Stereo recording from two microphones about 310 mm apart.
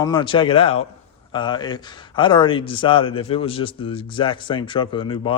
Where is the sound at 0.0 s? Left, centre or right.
Centre.